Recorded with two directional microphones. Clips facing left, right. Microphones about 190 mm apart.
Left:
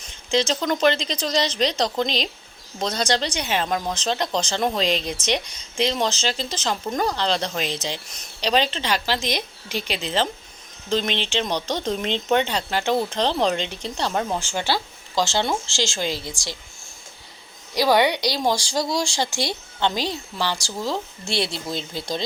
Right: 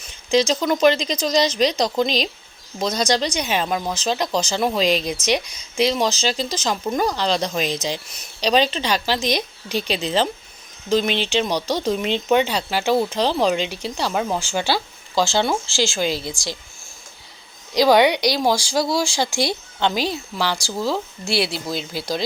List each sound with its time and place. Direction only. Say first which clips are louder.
0.3 s speech: right 4 dB; 10° right (ahead or behind)
17.7 s speech: right 4 dB; 15° right (ahead or behind)